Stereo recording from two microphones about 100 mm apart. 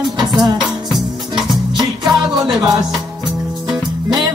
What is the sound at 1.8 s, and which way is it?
Music, 50° right (ahead or behind).